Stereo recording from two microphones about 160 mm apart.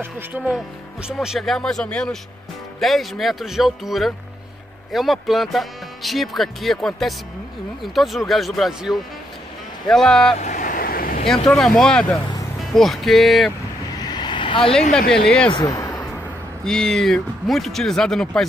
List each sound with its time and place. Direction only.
0.0 s speech: 10° right (ahead or behind)
10.4 s vehicle: 50° left (ahead or behind)
11.2 s speech: 5° left (ahead or behind)
13.9 s vehicle: 25° left (ahead or behind)
14.9 s speech: 5° left (ahead or behind)
15.5 s a sound: 25° left (ahead or behind)
16.6 s speech: 5° left (ahead or behind)